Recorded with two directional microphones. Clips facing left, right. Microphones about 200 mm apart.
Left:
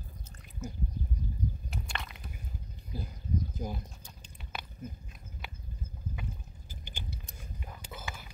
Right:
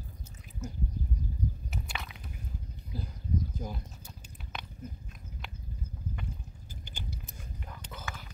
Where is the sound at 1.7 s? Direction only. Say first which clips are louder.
Even; 5° right (ahead or behind).